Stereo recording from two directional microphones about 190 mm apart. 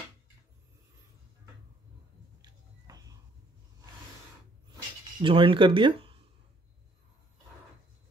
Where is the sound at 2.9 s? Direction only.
20° right (ahead or behind).